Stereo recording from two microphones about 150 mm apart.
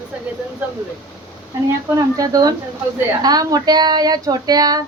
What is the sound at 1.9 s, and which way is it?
A woman's voice, 25° right (ahead or behind).